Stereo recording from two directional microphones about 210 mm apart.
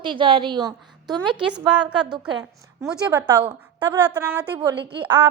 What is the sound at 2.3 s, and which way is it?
Speech, 20° right (ahead or behind).